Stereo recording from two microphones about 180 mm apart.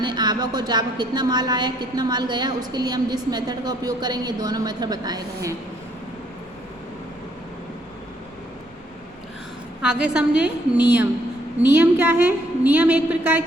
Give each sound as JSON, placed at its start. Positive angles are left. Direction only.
{"t": 0.0, "sound": "a woman's voice", "side_deg": -25}
{"t": 9.8, "sound": "a woman's voice", "side_deg": -5}